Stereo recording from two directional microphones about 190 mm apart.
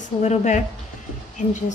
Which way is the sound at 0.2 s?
40° left (ahead or behind).